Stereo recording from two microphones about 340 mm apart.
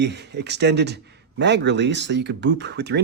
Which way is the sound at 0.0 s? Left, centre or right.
Right.